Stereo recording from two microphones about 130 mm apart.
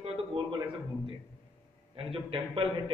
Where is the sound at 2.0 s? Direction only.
45° right (ahead or behind).